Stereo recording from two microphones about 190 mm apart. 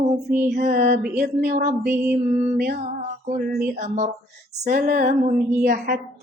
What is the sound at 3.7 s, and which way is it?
Speech, 40° right (ahead or behind).